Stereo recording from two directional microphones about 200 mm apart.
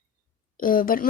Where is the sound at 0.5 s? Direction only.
45° left (ahead or behind).